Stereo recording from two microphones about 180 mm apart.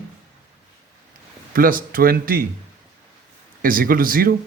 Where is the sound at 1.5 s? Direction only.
50° right (ahead or behind).